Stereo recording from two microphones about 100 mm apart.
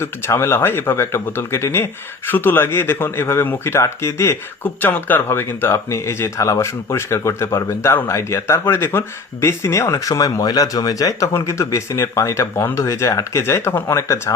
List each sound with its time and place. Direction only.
0.0 s speech: 25° left (ahead or behind)